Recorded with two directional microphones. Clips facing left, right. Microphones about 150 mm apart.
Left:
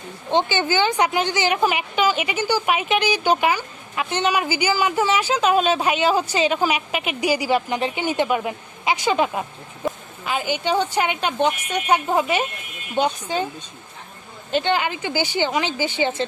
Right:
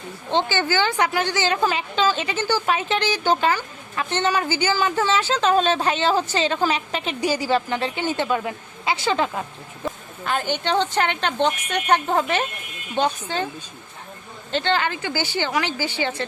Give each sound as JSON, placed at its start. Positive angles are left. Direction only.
{"t": 0.3, "sound": "a woman's voice", "side_deg": 15}
{"t": 14.5, "sound": "a woman's voice", "side_deg": 15}